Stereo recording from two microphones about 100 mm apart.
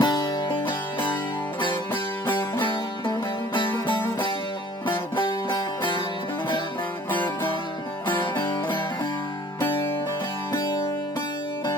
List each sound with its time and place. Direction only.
0.0 s music: 45° left (ahead or behind)
0.6 s music: 20° left (ahead or behind)
2.2 s music: 55° left (ahead or behind)
5.1 s music: 55° left (ahead or behind)